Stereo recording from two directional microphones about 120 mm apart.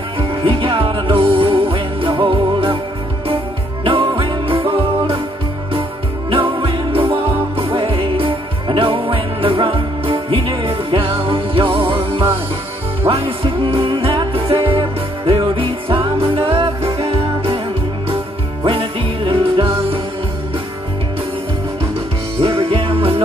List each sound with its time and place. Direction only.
0.2 s music: 45° right (ahead or behind)
3.8 s music: 45° right (ahead or behind)
6.3 s music: 45° right (ahead or behind)
18.7 s music: 45° right (ahead or behind)
22.4 s music: 50° right (ahead or behind)